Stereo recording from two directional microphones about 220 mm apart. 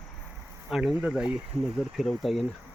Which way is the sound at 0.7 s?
Centre (ahead or behind).